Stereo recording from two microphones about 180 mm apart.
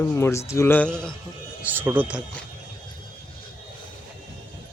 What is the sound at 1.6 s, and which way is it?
Speech, 10° right (ahead or behind).